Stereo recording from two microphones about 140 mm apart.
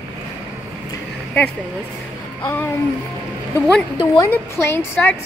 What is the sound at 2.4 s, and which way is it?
Speech, 10° left (ahead or behind).